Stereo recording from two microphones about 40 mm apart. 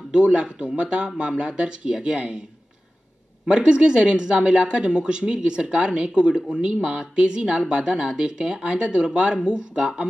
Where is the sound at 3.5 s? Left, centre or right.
Right.